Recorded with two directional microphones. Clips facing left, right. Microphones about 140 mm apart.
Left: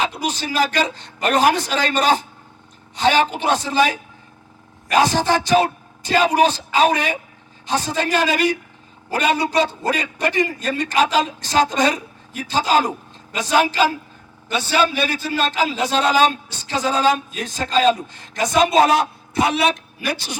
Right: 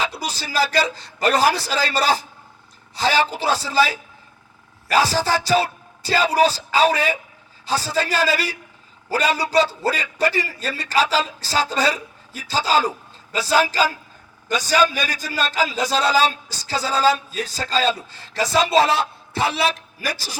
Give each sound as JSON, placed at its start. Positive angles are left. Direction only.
{"t": 0.0, "sound": "a man's voice", "side_deg": -35}